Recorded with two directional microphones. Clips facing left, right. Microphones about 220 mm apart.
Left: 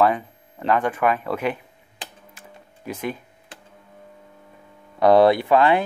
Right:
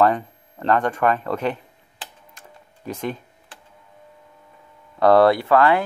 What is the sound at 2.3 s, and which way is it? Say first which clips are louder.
Music: left 2 dB; 10° left (ahead or behind).